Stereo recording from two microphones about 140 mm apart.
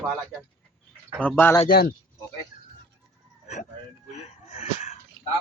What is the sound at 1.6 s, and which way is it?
Speech, 90° left.